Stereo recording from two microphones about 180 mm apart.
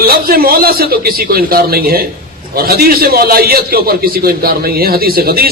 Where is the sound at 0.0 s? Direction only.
55° right (ahead or behind).